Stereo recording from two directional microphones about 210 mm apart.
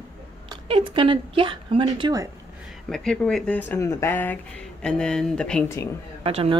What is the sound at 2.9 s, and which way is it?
Speech, centre (ahead or behind).